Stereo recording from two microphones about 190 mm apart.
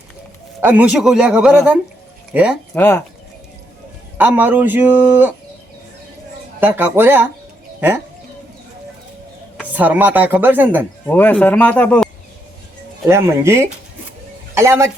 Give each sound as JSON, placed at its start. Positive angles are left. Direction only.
{"t": 0.6, "sound": "a man's voice", "side_deg": -10}
{"t": 2.7, "sound": "speech", "side_deg": 10}
{"t": 4.2, "sound": "a man's voice", "side_deg": -10}
{"t": 6.6, "sound": "a man's voice", "side_deg": -10}
{"t": 9.7, "sound": "a man's voice", "side_deg": -10}
{"t": 11.0, "sound": "speech", "side_deg": 10}
{"t": 13.1, "sound": "a man's voice", "side_deg": -15}